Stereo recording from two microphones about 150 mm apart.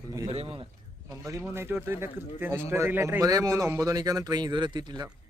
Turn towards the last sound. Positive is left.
turn(degrees=-30)  # may be behind; listen again after turning